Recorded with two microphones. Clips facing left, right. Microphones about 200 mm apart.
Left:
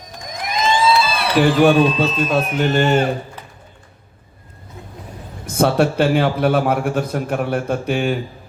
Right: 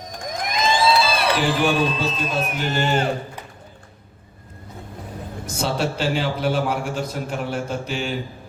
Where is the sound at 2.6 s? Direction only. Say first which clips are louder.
Left 7 dB; 60° left (ahead or behind).